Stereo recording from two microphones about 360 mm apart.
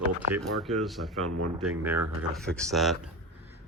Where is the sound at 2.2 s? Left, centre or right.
Centre.